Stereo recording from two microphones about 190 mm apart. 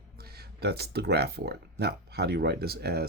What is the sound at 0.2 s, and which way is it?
Speech, 55° right (ahead or behind).